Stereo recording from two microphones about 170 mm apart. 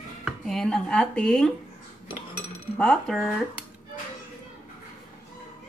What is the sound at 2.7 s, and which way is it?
Speech, 5° left (ahead or behind).